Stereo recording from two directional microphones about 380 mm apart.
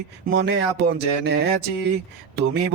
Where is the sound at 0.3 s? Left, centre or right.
Right.